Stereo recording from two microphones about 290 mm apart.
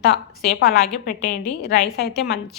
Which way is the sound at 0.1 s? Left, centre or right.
Left.